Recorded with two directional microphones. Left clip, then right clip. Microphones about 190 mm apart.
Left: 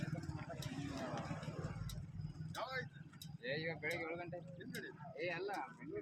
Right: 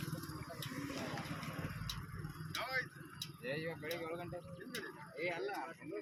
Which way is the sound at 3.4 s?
35° right (ahead or behind).